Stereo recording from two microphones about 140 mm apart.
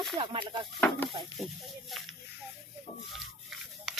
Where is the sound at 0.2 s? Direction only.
35° right (ahead or behind).